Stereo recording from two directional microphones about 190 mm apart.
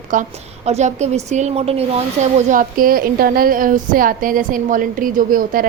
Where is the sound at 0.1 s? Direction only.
40° right (ahead or behind).